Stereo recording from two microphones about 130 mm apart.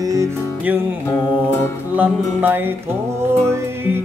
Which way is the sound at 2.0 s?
15° right (ahead or behind).